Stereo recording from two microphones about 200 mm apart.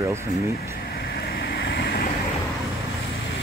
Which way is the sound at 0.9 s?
50° left (ahead or behind).